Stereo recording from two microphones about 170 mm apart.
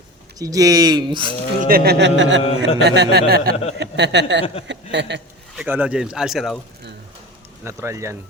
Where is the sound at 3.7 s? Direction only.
90° right.